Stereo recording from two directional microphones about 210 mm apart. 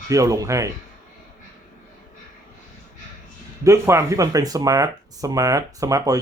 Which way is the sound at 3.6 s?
15° right (ahead or behind).